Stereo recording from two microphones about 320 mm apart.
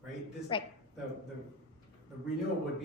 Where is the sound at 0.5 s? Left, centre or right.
Centre.